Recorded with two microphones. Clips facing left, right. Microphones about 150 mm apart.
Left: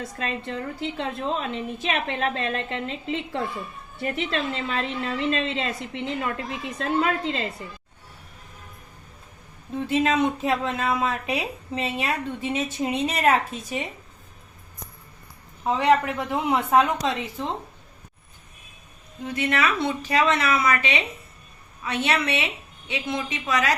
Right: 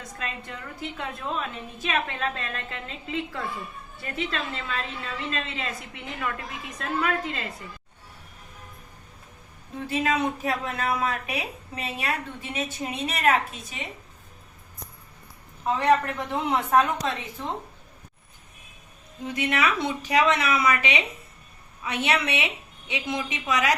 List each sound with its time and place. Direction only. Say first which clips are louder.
0.2 s a woman's voice: left 6 dB; 30° left (ahead or behind)
9.9 s a woman's voice: left 4 dB; 25° left (ahead or behind)
15.6 s speech: left 2 dB; 15° left (ahead or behind)
19.2 s a woman's voice: left 1 dB; 15° right (ahead or behind)